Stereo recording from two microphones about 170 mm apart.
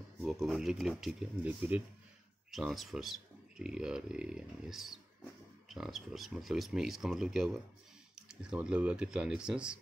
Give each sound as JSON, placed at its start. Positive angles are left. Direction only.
{"t": 0.2, "sound": "speech", "side_deg": 0}